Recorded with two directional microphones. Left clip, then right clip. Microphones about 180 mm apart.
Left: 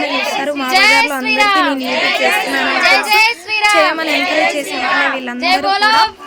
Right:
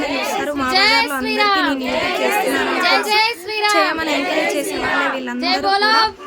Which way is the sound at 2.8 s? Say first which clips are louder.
Left 5 dB; 15° left (ahead or behind).